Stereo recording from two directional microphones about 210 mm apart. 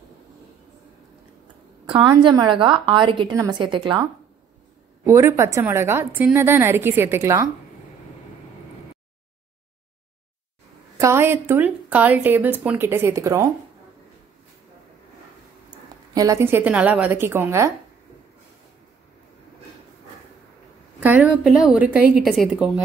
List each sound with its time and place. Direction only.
1.9 s a woman's voice: 25° right (ahead or behind)
5.0 s a woman's voice: 15° right (ahead or behind)
11.0 s a woman's voice: 10° right (ahead or behind)
15.7 s a woman's voice: 15° right (ahead or behind)
21.0 s a woman's voice: 10° right (ahead or behind)